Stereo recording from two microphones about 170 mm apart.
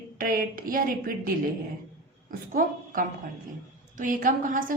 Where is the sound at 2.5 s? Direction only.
50° right (ahead or behind).